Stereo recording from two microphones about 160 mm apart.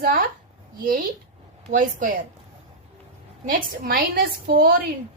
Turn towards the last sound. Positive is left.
turn(degrees=-70)  # may be behind; listen again after turning